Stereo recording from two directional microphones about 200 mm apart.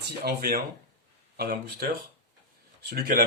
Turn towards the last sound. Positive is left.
turn(degrees=-50)  # may be behind; listen again after turning